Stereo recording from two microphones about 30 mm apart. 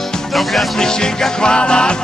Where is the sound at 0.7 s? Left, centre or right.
Left.